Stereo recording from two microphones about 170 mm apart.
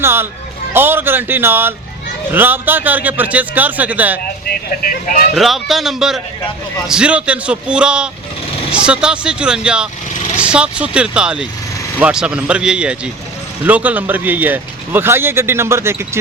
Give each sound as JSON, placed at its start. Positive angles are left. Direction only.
{"t": 0.0, "sound": "a man's voice", "side_deg": -15}
{"t": 4.4, "sound": "speech", "side_deg": 55}
{"t": 5.3, "sound": "a man's voice", "side_deg": 0}